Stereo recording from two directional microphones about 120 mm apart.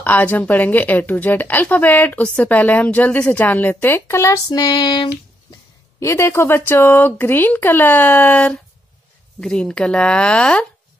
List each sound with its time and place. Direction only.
0.0 s a woman's voice: 15° left (ahead or behind); by 5.6 s 40° left (ahead or behind)
5.9 s a woman's voice: 25° left (ahead or behind); by 10.7 s 5° left (ahead or behind)